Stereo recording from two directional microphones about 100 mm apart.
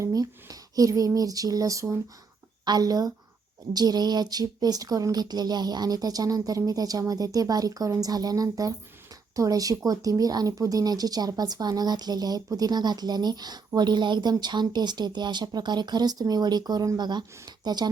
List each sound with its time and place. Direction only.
0.0 s speech: 35° right (ahead or behind)